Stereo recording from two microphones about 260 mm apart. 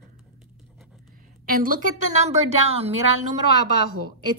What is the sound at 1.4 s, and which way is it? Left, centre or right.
A woman's voice, right.